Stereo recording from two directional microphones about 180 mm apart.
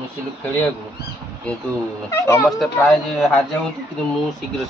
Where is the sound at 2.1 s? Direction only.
15° left (ahead or behind).